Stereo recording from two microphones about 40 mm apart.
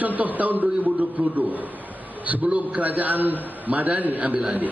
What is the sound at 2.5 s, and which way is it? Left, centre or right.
Speech, right.